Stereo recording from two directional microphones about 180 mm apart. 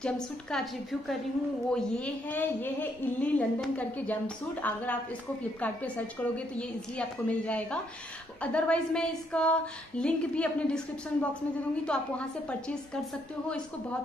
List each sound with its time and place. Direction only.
0.0 s a woman's voice: 5° left (ahead or behind)